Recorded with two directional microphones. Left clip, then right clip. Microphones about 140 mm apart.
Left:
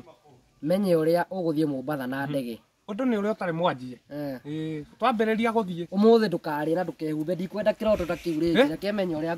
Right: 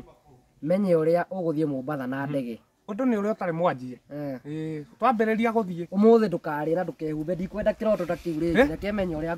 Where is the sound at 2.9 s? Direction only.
15° left (ahead or behind).